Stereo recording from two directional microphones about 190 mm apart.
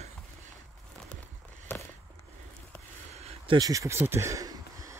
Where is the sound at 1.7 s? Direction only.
10° left (ahead or behind).